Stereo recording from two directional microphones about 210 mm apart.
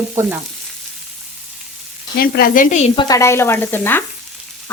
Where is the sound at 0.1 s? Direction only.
10° right (ahead or behind).